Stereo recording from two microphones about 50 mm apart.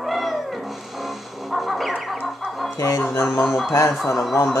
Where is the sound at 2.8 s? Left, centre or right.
Left.